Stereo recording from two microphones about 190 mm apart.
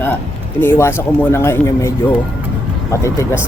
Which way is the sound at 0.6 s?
10° left (ahead or behind).